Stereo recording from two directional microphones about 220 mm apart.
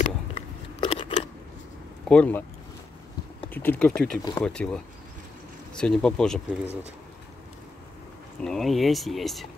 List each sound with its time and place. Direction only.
0.0 s scissors: 25° left (ahead or behind)
2.0 s speech: 5° left (ahead or behind)
3.4 s speech: 10° left (ahead or behind)
4.2 s speech: 20° left (ahead or behind)
4.5 s speech: 5° left (ahead or behind)
8.4 s speech: centre (ahead or behind)